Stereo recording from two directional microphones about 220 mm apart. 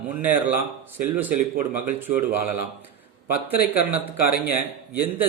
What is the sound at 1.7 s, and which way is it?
Speech, 10° right (ahead or behind).